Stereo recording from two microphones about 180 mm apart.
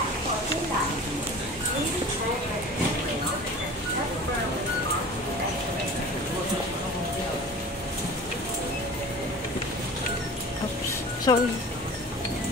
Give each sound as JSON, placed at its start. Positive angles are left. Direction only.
{"t": 11.3, "sound": "speech", "side_deg": 25}